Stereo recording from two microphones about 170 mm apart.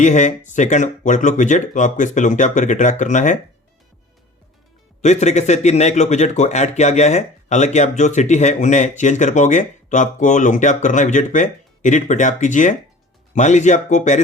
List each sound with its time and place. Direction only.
0.0 s speech: 45° left (ahead or behind)
5.0 s speech: 45° left (ahead or behind)